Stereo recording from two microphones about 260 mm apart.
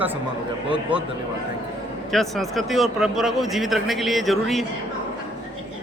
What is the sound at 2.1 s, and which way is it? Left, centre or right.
Speech, centre.